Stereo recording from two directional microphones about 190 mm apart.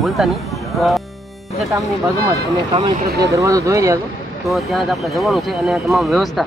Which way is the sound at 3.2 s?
15° right (ahead or behind).